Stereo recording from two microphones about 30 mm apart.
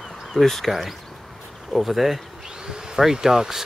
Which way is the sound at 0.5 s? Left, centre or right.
Centre.